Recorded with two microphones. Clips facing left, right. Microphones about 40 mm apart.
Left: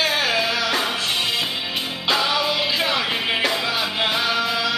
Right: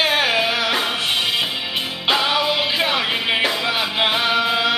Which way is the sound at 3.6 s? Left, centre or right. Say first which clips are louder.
Right 3 dB; right.